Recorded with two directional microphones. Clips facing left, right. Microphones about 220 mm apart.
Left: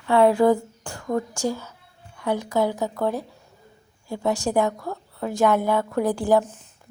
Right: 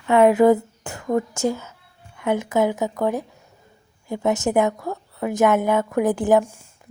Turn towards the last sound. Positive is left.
turn(degrees=-20)  # may be behind; listen again after turning